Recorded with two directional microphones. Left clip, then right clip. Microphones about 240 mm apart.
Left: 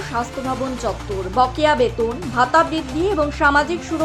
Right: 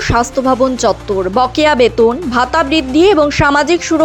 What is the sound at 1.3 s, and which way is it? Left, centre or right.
Speech, right.